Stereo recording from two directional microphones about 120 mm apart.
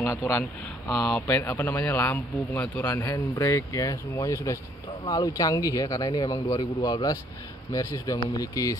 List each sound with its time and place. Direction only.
0.0 s a man's voice: 15° left (ahead or behind); by 8.7 s 30° left (ahead or behind)